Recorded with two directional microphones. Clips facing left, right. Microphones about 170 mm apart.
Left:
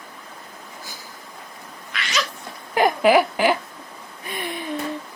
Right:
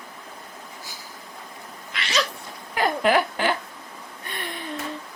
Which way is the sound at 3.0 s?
10° left (ahead or behind).